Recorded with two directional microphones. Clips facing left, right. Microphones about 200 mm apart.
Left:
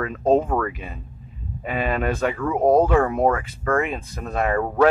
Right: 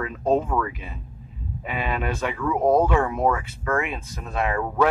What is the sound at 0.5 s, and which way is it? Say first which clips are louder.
Speech: left 2 dB; 50° left (ahead or behind).